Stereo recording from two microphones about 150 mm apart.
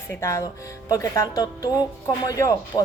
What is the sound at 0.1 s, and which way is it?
A woman's voice, 20° left (ahead or behind).